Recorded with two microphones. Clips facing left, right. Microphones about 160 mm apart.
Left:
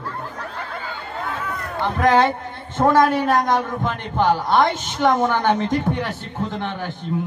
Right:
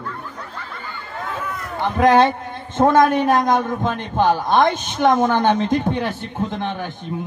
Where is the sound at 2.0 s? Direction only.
20° right (ahead or behind).